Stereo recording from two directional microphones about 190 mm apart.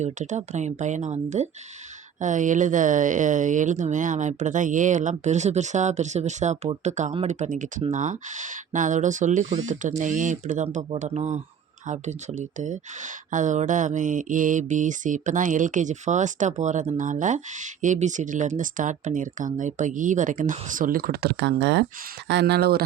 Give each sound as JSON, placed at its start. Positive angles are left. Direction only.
{"t": 0.0, "sound": "speech", "side_deg": -40}